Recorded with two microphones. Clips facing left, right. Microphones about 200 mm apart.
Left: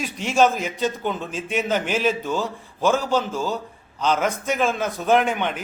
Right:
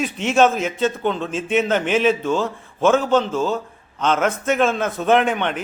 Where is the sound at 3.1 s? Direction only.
Centre (ahead or behind).